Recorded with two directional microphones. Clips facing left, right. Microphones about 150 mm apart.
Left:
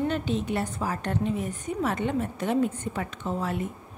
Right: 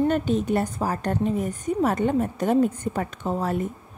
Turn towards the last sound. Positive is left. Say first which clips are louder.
# right 4 dB
turn(degrees=-40)  # may be behind; listen again after turning